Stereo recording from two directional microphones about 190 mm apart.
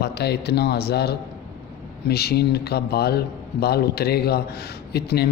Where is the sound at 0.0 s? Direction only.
60° left (ahead or behind).